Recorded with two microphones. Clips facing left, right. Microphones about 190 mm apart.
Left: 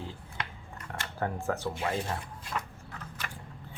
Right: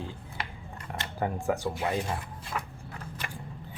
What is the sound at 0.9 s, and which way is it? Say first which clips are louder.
Speech: right 2 dB; 15° right (ahead or behind).